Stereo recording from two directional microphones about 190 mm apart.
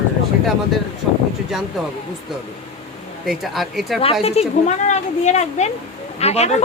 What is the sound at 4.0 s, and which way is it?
Speech, 30° left (ahead or behind).